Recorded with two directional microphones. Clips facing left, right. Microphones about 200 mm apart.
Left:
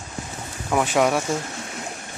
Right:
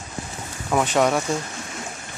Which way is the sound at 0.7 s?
5° left (ahead or behind).